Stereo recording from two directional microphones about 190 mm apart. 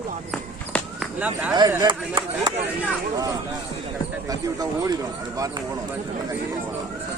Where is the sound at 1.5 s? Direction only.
20° right (ahead or behind).